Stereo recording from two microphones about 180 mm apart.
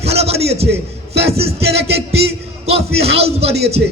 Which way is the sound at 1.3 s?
35° right (ahead or behind).